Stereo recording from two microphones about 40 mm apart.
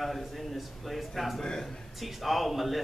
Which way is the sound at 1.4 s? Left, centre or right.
Centre.